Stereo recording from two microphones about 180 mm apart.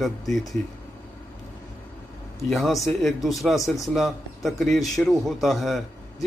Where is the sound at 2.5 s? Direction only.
Centre (ahead or behind).